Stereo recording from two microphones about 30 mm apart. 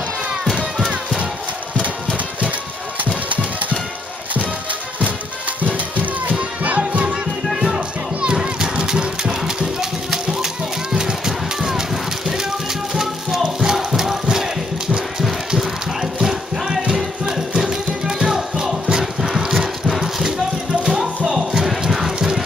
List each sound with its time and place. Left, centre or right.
0.7 s music: centre
7.5 s music: right
12.9 s music: centre
16.0 s a sound: centre
17.4 s music: centre
19.2 s rattle: centre
20.8 s music: centre
21.3 s a sound: centre